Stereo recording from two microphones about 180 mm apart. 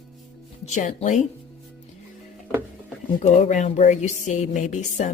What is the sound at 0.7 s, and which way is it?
Speech, 40° left (ahead or behind).